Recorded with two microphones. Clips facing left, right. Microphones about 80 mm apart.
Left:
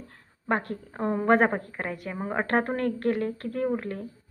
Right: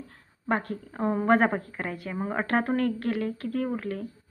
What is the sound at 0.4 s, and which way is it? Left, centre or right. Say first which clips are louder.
Speech: even; left.